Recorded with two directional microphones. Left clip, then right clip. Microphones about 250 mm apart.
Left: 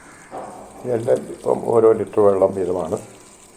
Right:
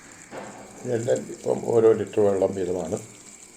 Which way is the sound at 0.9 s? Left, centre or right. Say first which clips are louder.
Left 5 dB; centre.